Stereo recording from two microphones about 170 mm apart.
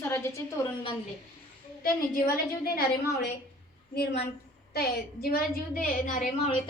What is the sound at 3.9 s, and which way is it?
A woman's voice, 70° left (ahead or behind).